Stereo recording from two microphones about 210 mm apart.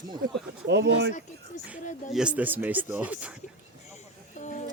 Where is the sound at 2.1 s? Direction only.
5° right (ahead or behind).